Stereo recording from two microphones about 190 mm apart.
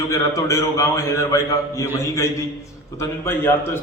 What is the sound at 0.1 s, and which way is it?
A man's voice, 15° left (ahead or behind).